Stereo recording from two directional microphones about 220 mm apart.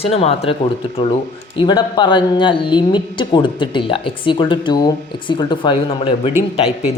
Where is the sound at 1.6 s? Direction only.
20° left (ahead or behind).